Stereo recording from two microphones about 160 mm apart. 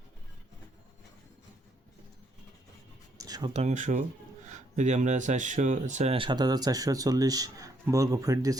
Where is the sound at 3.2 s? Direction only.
25° right (ahead or behind).